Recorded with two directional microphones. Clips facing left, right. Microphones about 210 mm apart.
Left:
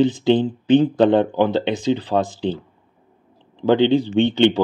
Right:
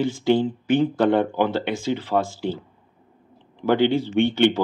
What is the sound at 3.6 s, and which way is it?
Speech, 20° left (ahead or behind).